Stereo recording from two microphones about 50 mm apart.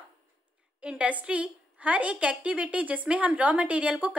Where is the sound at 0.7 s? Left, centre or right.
Right.